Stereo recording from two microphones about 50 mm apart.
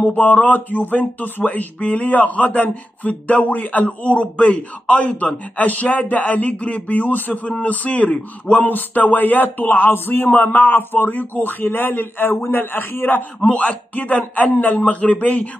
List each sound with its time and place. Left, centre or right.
0.0 s speech: left
13.5 s speech: left